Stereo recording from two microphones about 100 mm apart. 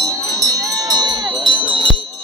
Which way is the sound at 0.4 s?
45° right (ahead or behind).